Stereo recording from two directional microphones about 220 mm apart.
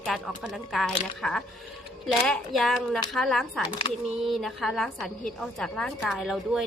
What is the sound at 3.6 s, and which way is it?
Speech, 20° left (ahead or behind).